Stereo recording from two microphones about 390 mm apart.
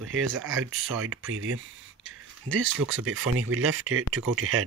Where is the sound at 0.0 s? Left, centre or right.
Right.